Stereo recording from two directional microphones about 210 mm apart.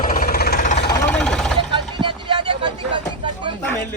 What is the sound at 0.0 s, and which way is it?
Vehicle, 40° left (ahead or behind).